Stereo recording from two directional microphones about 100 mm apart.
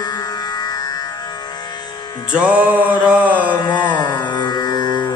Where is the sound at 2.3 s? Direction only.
15° right (ahead or behind).